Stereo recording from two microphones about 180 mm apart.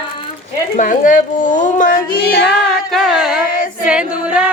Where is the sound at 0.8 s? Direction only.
50° left (ahead or behind).